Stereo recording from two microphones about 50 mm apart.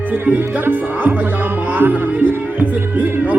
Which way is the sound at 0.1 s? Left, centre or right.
Right.